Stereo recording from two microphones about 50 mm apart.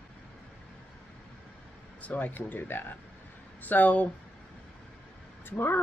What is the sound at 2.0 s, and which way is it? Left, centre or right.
Speech, left.